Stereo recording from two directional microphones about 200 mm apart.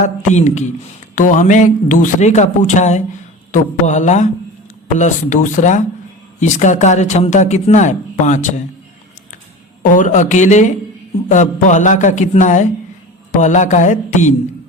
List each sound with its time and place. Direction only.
0.0 s speech: 35° left (ahead or behind)
9.8 s speech: 40° left (ahead or behind)